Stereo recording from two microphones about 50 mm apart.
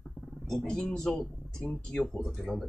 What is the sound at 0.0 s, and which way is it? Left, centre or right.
Wild animals, centre.